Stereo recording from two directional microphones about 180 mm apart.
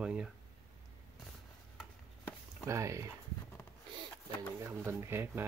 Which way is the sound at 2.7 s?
15° right (ahead or behind).